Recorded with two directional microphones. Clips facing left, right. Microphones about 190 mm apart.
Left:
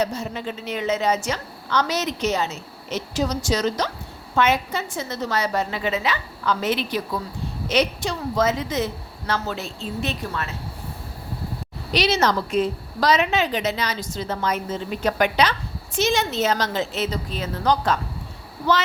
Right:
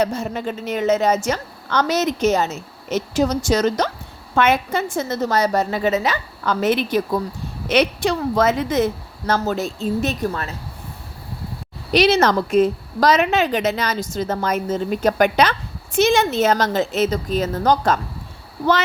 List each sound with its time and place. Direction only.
0.0 s a woman's voice: 50° right (ahead or behind)
7.7 s a woman's voice: 60° right (ahead or behind); by 10.5 s 40° right (ahead or behind)
11.9 s a woman's voice: 50° right (ahead or behind)